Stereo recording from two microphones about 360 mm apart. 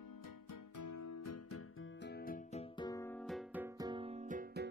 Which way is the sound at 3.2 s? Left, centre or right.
Centre.